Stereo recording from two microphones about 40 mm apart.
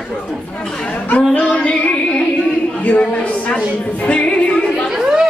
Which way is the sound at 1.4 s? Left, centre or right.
Left.